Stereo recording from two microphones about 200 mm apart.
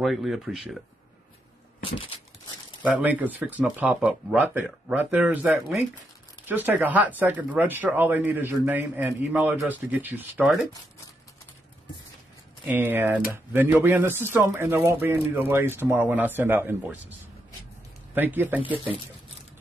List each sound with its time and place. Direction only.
0.0 s speech: centre (ahead or behind)
1.8 s a sound: 25° left (ahead or behind)
2.8 s speech: 10° right (ahead or behind)
12.6 s speech: 10° right (ahead or behind)
18.1 s speech: 10° right (ahead or behind)